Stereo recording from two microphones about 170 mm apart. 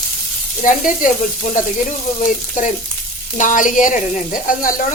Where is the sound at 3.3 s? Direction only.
50° left (ahead or behind).